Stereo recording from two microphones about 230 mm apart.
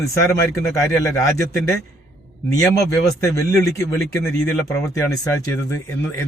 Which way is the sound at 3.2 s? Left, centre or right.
Centre.